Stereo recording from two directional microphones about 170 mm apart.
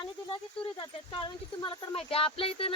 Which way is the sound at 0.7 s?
30° left (ahead or behind).